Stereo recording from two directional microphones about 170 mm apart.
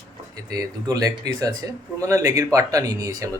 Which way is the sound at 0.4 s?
20° right (ahead or behind).